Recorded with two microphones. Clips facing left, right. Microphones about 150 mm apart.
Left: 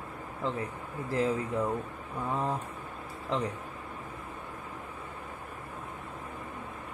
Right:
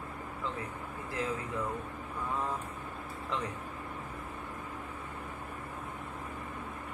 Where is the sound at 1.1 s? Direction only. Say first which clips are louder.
Left 7 dB; 35° left (ahead or behind).